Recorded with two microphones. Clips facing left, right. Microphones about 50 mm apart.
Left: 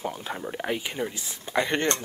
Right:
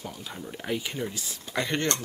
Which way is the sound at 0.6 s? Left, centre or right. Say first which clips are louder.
Even; centre.